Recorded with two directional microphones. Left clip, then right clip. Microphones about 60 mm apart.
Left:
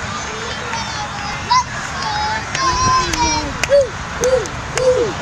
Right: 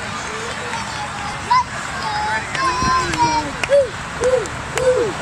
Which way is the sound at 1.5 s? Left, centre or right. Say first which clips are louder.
Left 1 dB; left.